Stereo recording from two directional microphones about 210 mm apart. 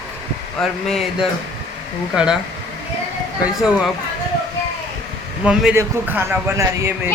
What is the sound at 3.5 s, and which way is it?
Speech, centre (ahead or behind).